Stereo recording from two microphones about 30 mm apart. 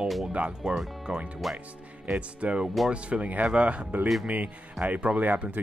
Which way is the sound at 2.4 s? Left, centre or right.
Right.